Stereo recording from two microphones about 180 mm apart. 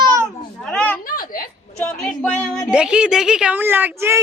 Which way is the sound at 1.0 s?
50° left (ahead or behind).